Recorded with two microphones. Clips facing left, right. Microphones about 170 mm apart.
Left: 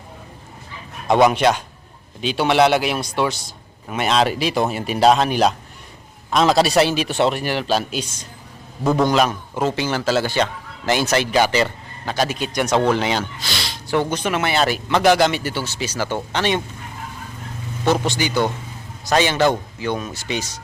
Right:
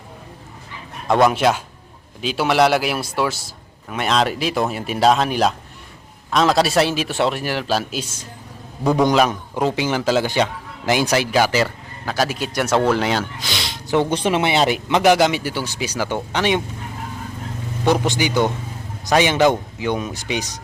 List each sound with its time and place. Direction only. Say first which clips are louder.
1.0 s a man's voice: left 1 dB; centre (ahead or behind)
13.4 s gasp: right 1 dB; 20° right (ahead or behind)
14.1 s speech: right 3 dB; 30° right (ahead or behind); by 16.6 s 10° right (ahead or behind)
17.8 s speech: right 1 dB; 15° right (ahead or behind)